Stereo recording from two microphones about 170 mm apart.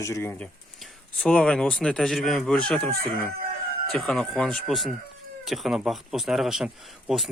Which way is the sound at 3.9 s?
5° left (ahead or behind).